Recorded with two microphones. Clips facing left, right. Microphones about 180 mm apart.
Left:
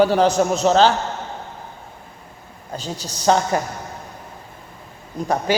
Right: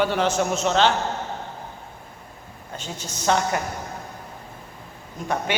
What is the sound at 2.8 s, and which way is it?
Speech, 35° left (ahead or behind).